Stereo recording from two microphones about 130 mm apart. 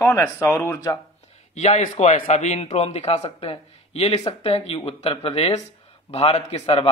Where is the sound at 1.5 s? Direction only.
60° left (ahead or behind).